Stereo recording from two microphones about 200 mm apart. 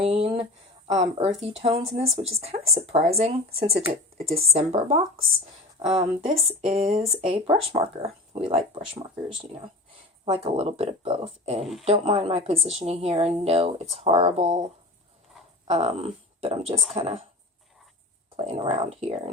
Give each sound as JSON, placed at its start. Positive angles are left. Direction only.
{"t": 0.0, "sound": "a sound", "side_deg": -30}
{"t": 0.9, "sound": "a woman's voice", "side_deg": -30}
{"t": 10.2, "sound": "a woman's voice", "side_deg": -30}
{"t": 11.6, "sound": "speech", "side_deg": 0}
{"t": 11.9, "sound": "a woman's voice", "side_deg": -30}
{"t": 15.6, "sound": "speech", "side_deg": -30}
{"t": 18.3, "sound": "speech", "side_deg": -25}